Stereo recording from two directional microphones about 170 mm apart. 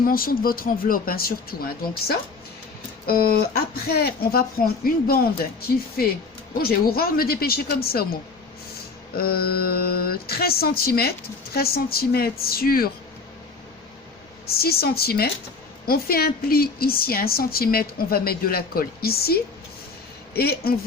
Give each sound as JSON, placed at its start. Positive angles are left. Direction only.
{"t": 0.0, "sound": "a woman's voice", "side_deg": 60}
{"t": 9.1, "sound": "a woman's voice", "side_deg": 65}
{"t": 14.4, "sound": "a woman's voice", "side_deg": 65}